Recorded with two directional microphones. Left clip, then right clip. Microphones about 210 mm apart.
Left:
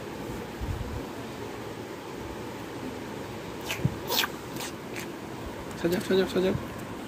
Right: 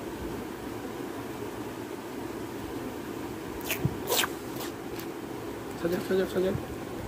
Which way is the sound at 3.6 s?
45° right (ahead or behind).